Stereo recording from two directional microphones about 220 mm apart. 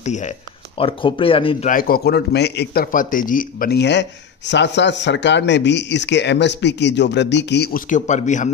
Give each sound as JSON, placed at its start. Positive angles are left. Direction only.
{"t": 0.0, "sound": "speech", "side_deg": 35}
{"t": 1.7, "sound": "a man's voice", "side_deg": 40}